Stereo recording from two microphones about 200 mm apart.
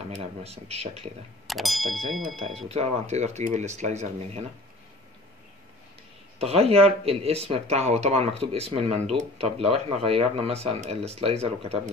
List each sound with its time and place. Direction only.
0.1 s speech: 30° right (ahead or behind)
1.5 s speech: centre (ahead or behind)
2.4 s speech: 30° right (ahead or behind)
6.3 s speech: 30° right (ahead or behind)